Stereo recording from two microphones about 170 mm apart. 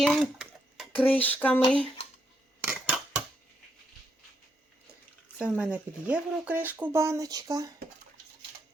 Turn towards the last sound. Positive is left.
turn(degrees=-20)  # may be behind; listen again after turning